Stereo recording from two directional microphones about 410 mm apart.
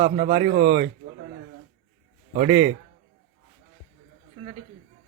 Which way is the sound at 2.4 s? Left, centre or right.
Centre.